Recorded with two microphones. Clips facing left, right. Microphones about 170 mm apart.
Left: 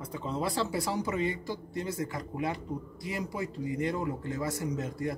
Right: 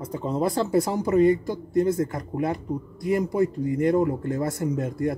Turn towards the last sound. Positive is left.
turn(degrees=-55)  # may be behind; listen again after turning